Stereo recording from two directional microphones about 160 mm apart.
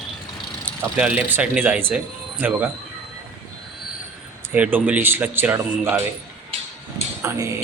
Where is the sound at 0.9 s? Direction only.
5° right (ahead or behind).